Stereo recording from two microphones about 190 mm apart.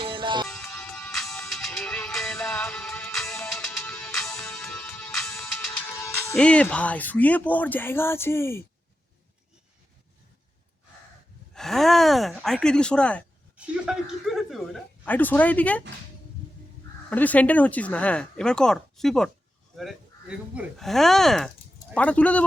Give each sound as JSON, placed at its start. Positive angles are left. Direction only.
{"t": 0.0, "sound": "music", "side_deg": -25}
{"t": 0.4, "sound": "music", "side_deg": 0}
{"t": 11.5, "sound": "speech", "side_deg": 0}
{"t": 17.1, "sound": "speech", "side_deg": 10}